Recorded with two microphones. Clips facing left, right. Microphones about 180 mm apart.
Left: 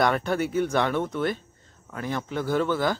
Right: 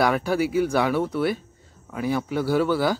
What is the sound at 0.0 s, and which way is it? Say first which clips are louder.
Speech: right 2 dB; 5° right (ahead or behind).